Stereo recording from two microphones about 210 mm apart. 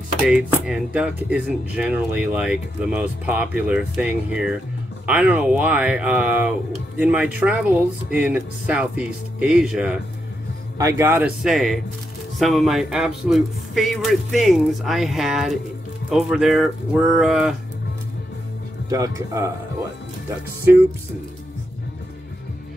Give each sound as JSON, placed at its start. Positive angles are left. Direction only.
{"t": 0.2, "sound": "speech", "side_deg": -5}
{"t": 18.9, "sound": "speech", "side_deg": -15}